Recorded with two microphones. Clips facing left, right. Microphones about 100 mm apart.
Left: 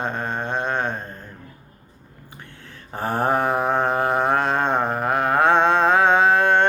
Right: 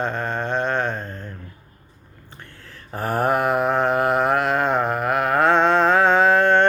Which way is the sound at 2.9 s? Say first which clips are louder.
Right 1 dB; 30° left (ahead or behind).